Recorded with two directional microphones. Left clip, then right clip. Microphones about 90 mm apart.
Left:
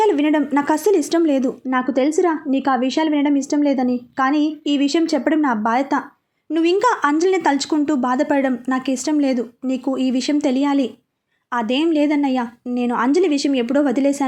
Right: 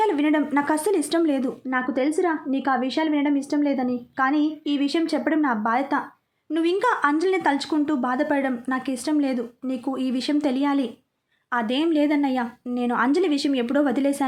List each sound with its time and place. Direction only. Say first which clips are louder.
0.0 s a woman's voice: left 5 dB; 30° left (ahead or behind)